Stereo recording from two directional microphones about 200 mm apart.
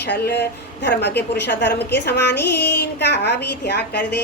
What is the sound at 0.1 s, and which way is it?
A woman's voice, 55° left (ahead or behind).